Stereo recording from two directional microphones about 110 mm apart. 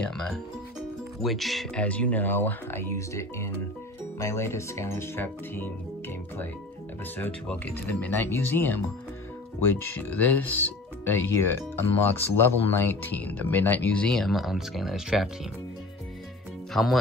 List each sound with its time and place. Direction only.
0.0 s speech: 5° left (ahead or behind)
1.8 s speech: 10° left (ahead or behind); by 15.2 s 5° right (ahead or behind)
16.7 s speech: centre (ahead or behind)